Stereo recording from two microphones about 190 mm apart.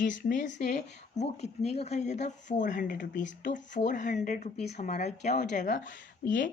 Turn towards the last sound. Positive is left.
turn(degrees=45)  # may be behind; listen again after turning